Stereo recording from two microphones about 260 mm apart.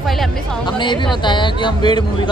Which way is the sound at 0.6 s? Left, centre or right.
Centre.